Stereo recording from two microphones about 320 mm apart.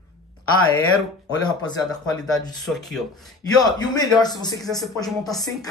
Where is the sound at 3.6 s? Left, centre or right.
Centre.